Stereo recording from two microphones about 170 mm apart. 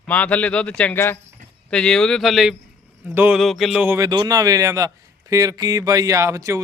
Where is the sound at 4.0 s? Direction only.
20° right (ahead or behind).